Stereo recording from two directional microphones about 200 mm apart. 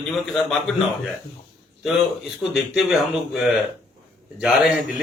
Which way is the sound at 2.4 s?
Centre (ahead or behind).